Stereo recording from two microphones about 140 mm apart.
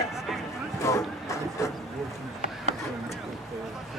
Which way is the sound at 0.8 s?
20° left (ahead or behind).